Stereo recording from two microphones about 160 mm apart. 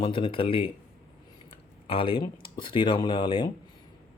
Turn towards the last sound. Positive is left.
turn(degrees=30)  # may be behind; listen again after turning